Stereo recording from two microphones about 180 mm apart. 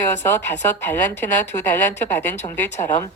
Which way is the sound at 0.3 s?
10° left (ahead or behind).